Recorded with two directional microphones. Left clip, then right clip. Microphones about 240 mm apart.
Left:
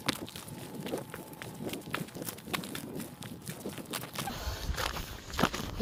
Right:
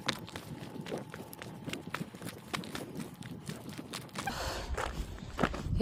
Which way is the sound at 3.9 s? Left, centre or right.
Centre.